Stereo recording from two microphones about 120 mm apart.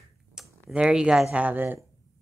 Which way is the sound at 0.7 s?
5° right (ahead or behind).